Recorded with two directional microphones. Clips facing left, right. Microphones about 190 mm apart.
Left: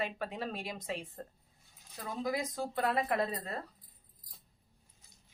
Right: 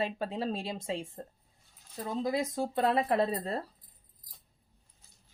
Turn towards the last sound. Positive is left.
turn(degrees=-30)  # may be behind; listen again after turning